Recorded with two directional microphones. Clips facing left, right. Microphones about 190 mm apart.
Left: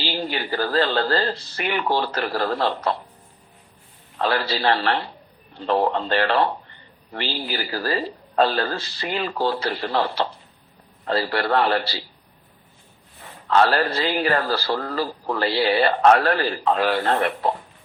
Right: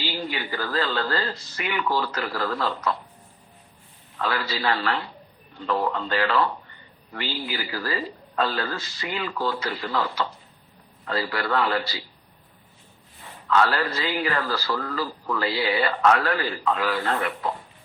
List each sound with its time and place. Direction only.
0.0 s speech: 30° left (ahead or behind)
4.2 s a man's voice: 30° left (ahead or behind)
13.5 s speech: 30° left (ahead or behind)